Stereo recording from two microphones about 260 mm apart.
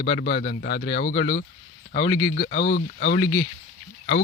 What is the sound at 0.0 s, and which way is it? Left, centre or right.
Speech, left.